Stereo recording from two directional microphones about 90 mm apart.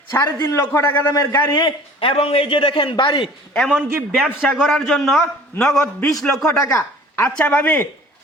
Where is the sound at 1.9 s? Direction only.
90° left; by 3.3 s 70° left (ahead or behind).